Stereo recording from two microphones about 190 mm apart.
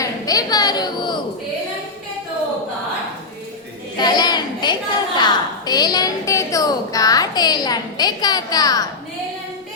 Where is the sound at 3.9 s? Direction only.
20° left (ahead or behind).